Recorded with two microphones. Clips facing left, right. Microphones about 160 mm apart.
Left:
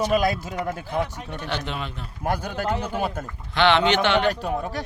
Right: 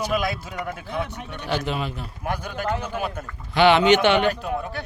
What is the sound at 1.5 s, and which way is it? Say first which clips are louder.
Speech: right 5 dB; 5° right (ahead or behind).